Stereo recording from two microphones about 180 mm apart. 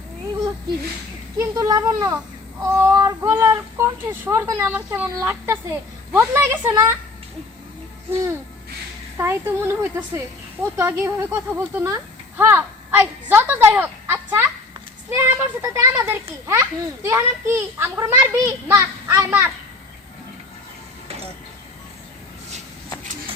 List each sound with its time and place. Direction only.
1.4 s a child's voice: 20° right (ahead or behind)
9.1 s a child's voice: 10° right (ahead or behind)